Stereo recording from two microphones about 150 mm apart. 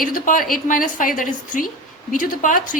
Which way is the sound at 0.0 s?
65° left (ahead or behind).